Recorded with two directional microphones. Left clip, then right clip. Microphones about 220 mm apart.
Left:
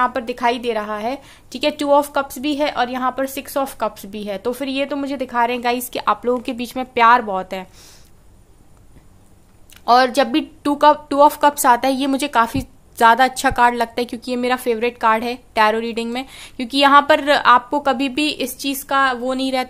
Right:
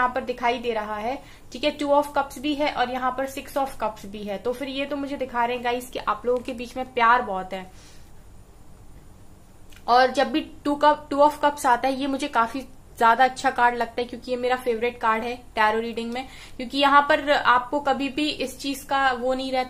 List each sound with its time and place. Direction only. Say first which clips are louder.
0.0 s a woman's voice: left 5 dB; 50° left (ahead or behind)
9.8 s a woman's voice: left 5 dB; 50° left (ahead or behind)